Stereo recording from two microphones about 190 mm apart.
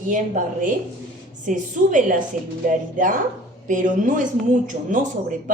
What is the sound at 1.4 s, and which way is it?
A woman's voice, 45° right (ahead or behind).